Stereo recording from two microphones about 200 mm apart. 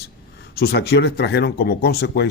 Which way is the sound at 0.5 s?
55° left (ahead or behind).